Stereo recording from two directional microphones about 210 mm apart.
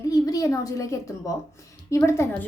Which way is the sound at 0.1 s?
15° left (ahead or behind).